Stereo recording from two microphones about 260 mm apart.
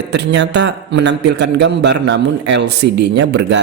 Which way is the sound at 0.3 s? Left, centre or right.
Right.